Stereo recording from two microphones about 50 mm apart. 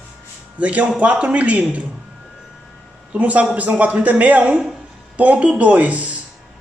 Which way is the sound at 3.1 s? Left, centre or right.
Right.